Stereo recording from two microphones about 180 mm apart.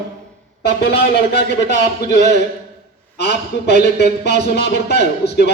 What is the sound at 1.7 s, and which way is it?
Speech, 40° right (ahead or behind).